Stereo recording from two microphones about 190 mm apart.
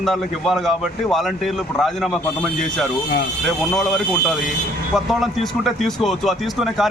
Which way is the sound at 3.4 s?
Centre (ahead or behind).